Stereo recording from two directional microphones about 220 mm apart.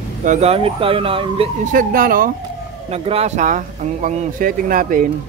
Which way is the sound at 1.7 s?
40° right (ahead or behind).